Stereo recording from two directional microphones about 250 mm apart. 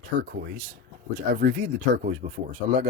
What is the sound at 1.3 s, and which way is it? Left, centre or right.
Speech, right.